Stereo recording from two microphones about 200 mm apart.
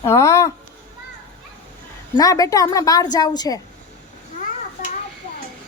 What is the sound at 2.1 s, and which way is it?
A woman's voice, 15° left (ahead or behind).